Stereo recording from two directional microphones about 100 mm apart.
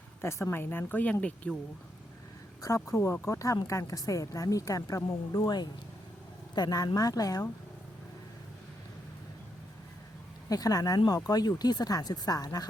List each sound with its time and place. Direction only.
0.2 s speech: 25° left (ahead or behind); by 1.5 s 10° left (ahead or behind)
2.6 s speech: 30° left (ahead or behind)
10.5 s speech: 35° left (ahead or behind)